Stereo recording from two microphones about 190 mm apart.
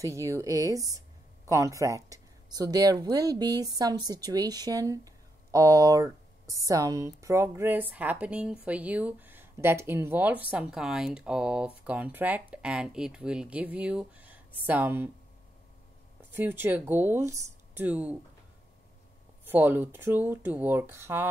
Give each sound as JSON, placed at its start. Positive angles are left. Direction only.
{"t": 0.0, "sound": "speech", "side_deg": -15}
{"t": 16.2, "sound": "speech", "side_deg": -10}
{"t": 19.4, "sound": "speech", "side_deg": -10}